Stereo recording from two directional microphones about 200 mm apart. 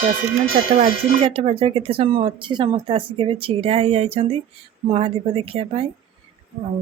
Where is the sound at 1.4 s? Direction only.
30° right (ahead or behind).